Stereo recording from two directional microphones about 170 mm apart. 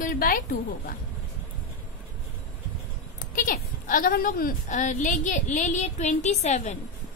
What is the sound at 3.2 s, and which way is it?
A woman's voice, 55° left (ahead or behind).